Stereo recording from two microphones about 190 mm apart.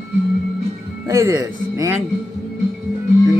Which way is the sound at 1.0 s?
15° right (ahead or behind).